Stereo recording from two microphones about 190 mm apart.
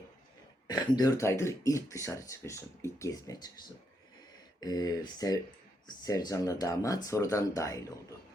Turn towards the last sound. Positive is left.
turn(degrees=15)  # may be behind; listen again after turning